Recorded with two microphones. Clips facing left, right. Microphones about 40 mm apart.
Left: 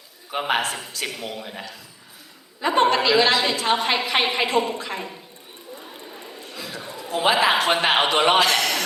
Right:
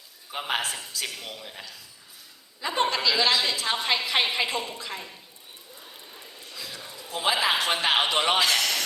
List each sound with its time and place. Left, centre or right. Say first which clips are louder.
0.3 s a man's voice: left 6 dB; left
1.0 s a man's voice: left 7 dB; centre
1.4 s a woman's voice: left 6 dB; left
6.1 s a sound: left 6 dB; left
7.1 s a woman's voice: left 6 dB; left
7.5 s a woman's voice: left 5 dB; left
8.5 s a sound: left 4 dB; left